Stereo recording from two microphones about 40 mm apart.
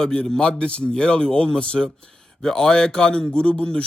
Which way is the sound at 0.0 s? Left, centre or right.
Centre.